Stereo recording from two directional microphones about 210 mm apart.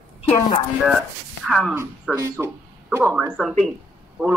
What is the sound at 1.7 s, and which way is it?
Speech, 10° right (ahead or behind).